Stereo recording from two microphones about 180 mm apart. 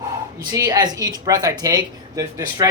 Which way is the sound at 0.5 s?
20° right (ahead or behind).